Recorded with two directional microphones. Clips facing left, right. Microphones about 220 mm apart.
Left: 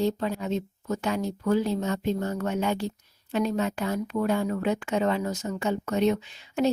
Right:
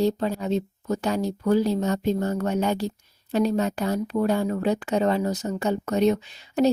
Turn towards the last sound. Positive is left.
turn(degrees=-40)  # may be behind; listen again after turning